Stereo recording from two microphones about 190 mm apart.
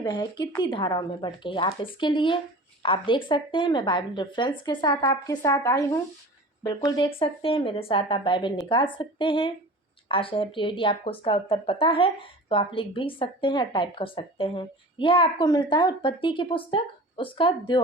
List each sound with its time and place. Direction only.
0.0 s speech: 25° left (ahead or behind)